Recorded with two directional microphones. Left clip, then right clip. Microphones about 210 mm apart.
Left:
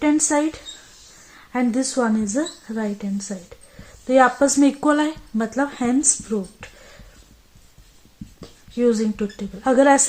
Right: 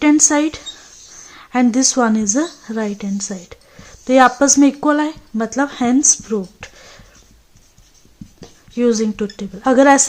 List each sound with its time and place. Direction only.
0.0 s a woman's voice: 25° right (ahead or behind)
1.5 s a woman's voice: 25° right (ahead or behind)
8.8 s a woman's voice: 20° right (ahead or behind)